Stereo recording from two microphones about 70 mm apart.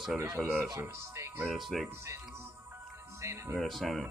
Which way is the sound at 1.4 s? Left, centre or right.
Centre.